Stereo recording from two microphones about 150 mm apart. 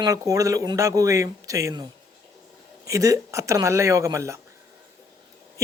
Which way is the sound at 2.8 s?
20° right (ahead or behind).